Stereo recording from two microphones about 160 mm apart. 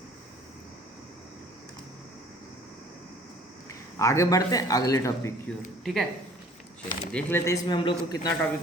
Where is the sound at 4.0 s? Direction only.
20° left (ahead or behind).